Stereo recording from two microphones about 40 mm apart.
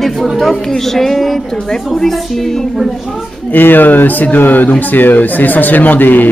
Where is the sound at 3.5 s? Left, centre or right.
Left.